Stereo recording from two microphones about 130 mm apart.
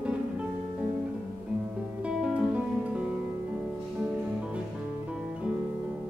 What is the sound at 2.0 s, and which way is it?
Music, 10° right (ahead or behind).